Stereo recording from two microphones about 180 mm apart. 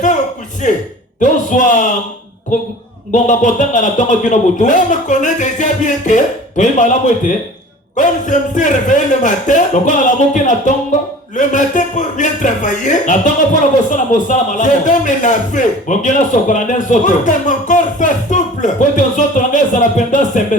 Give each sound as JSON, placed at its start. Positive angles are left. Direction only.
{"t": 0.6, "sound": "speech", "side_deg": 45}
{"t": 3.1, "sound": "speech", "side_deg": 45}